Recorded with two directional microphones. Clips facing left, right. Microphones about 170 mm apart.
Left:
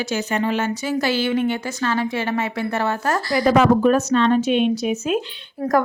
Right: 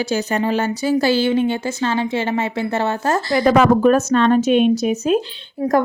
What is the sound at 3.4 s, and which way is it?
A woman's voice, 55° right (ahead or behind).